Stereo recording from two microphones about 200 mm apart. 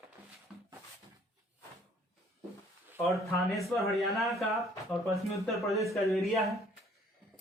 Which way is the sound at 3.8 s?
Centre (ahead or behind).